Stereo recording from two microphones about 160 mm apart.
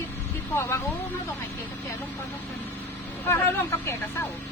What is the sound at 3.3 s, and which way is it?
Speech, 15° left (ahead or behind).